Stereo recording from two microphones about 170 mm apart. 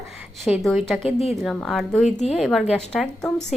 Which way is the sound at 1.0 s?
40° left (ahead or behind).